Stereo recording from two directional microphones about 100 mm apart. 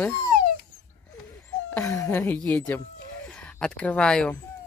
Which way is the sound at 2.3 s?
15° left (ahead or behind).